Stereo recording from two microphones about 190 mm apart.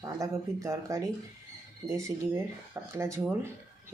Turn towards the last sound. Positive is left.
turn(degrees=-15)  # may be behind; listen again after turning